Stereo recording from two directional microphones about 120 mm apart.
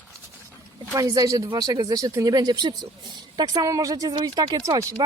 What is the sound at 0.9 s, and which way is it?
Speech, 25° right (ahead or behind).